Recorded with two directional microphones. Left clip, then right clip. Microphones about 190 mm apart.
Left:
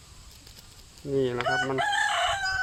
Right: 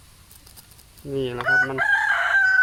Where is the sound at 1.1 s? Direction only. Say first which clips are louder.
Even; 5° right (ahead or behind).